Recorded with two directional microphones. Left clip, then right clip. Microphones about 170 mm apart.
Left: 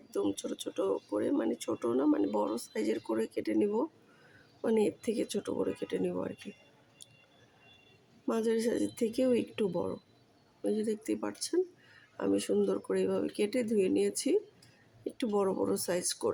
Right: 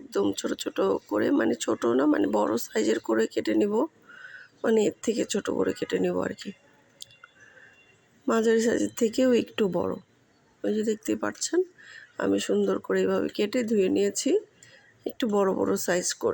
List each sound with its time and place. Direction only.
0.1 s speech: 15° right (ahead or behind)
8.3 s speech: 15° right (ahead or behind)